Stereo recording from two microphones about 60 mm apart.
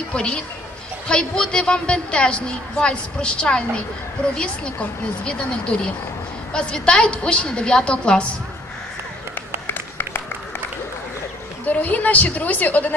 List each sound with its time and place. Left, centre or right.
0.1 s a woman's voice: centre
5.7 s a woman's voice: centre
9.7 s a sound: left
11.6 s a woman's voice: left